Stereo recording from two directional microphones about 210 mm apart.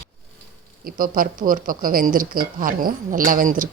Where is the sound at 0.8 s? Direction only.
45° right (ahead or behind).